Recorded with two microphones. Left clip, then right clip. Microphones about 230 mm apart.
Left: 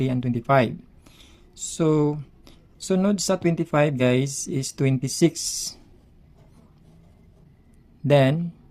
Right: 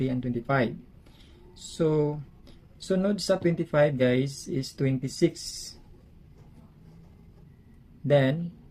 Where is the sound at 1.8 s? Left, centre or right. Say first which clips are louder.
Left 4 dB; left.